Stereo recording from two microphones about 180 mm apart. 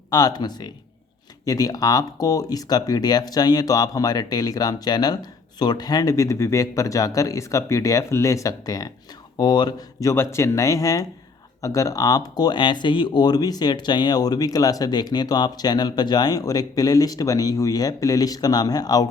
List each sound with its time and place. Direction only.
0.1 s speech: 20° left (ahead or behind)